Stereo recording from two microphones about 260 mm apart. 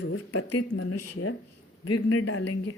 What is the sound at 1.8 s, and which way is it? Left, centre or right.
Speech, left.